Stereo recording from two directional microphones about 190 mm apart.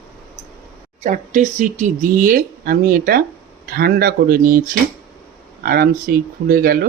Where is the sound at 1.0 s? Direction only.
40° right (ahead or behind).